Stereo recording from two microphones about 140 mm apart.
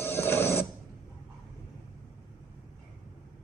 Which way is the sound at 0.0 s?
15° left (ahead or behind).